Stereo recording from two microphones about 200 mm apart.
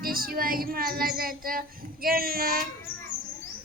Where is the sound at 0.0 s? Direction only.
45° right (ahead or behind).